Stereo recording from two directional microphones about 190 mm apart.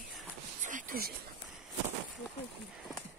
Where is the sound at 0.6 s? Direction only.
45° right (ahead or behind).